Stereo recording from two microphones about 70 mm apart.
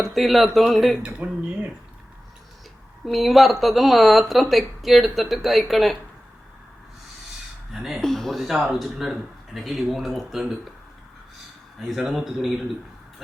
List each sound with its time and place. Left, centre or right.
0.0 s speech: centre
1.0 s speech: centre
3.1 s speech: centre
7.7 s speech: centre
11.9 s speech: centre